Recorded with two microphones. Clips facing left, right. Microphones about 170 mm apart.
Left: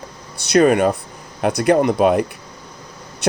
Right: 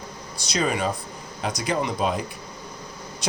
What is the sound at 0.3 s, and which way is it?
Speech, 60° left (ahead or behind).